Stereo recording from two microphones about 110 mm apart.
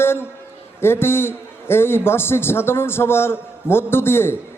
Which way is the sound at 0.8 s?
20° left (ahead or behind).